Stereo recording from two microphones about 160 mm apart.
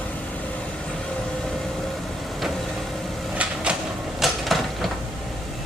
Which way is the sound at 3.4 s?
5° right (ahead or behind).